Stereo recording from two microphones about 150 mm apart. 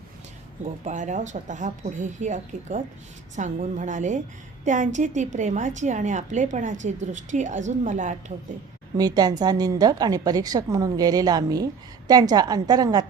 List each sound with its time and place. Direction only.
0.9 s a woman's voice: 55° right (ahead or behind)
9.0 s a woman's voice: 25° right (ahead or behind)